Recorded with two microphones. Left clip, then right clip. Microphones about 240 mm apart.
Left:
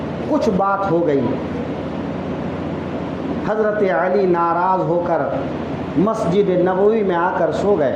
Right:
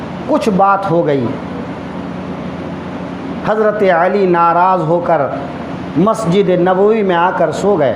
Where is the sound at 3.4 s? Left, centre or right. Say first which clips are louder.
Right 6 dB; right.